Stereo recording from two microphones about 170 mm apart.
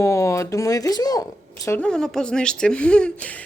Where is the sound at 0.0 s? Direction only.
20° left (ahead or behind).